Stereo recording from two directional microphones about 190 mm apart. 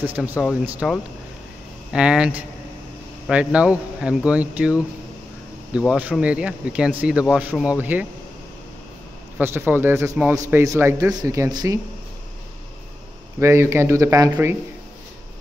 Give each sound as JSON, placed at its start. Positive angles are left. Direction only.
{"t": 0.0, "sound": "speech", "side_deg": -10}
{"t": 9.4, "sound": "speech", "side_deg": -10}
{"t": 13.4, "sound": "speech", "side_deg": -15}